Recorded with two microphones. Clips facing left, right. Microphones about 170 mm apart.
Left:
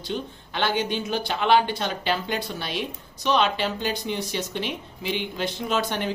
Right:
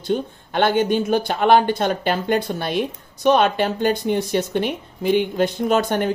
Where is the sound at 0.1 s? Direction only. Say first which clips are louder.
Right 8 dB; 50° right (ahead or behind).